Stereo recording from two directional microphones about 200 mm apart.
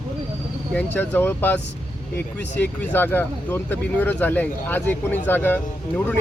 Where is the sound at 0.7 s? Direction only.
10° left (ahead or behind).